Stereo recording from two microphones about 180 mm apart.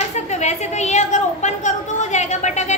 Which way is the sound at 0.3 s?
40° left (ahead or behind).